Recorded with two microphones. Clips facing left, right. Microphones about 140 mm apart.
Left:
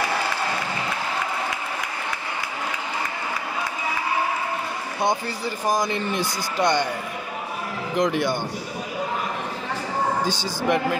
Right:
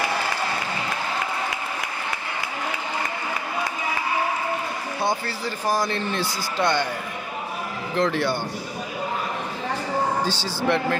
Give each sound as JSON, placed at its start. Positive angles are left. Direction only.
{"t": 5.0, "sound": "speech", "side_deg": 15}
{"t": 7.9, "sound": "speech", "side_deg": 15}
{"t": 10.2, "sound": "speech", "side_deg": 15}